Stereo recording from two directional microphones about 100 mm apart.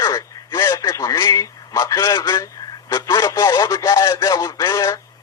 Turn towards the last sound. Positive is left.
turn(degrees=35)  # may be behind; listen again after turning